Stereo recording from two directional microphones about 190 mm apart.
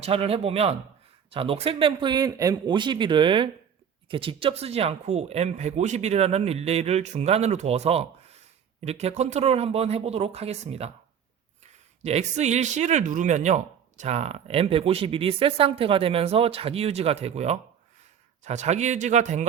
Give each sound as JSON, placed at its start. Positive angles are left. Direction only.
{"t": 0.0, "sound": "speech", "side_deg": -30}
{"t": 12.0, "sound": "speech", "side_deg": -35}